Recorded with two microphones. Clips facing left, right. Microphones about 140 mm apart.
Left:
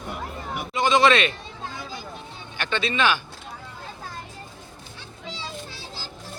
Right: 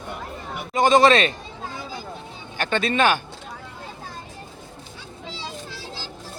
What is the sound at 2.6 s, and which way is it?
Speech, 45° right (ahead or behind).